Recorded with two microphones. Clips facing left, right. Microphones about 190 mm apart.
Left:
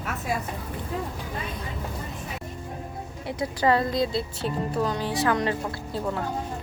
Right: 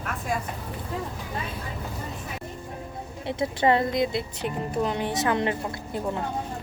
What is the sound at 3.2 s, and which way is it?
Speech, 25° right (ahead or behind).